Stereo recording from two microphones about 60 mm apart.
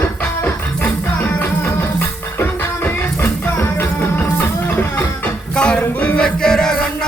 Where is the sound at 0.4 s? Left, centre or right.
Left.